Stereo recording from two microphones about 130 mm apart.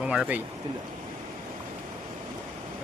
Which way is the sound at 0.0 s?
5° right (ahead or behind).